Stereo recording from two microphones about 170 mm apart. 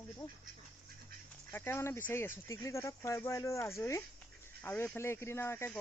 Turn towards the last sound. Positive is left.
turn(degrees=15)  # may be behind; listen again after turning